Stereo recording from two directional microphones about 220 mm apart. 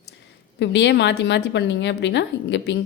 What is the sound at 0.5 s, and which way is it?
Speech, 50° left (ahead or behind).